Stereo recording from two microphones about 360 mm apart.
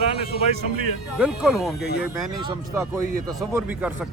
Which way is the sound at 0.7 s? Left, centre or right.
Right.